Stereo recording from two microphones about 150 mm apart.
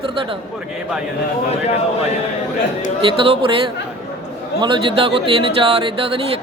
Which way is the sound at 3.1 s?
35° right (ahead or behind).